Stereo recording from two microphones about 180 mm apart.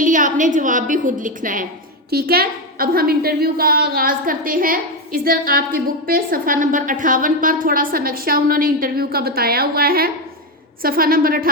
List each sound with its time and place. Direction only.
0.0 s a woman's voice: 45° right (ahead or behind)
2.0 s a woman's voice: 60° right (ahead or behind)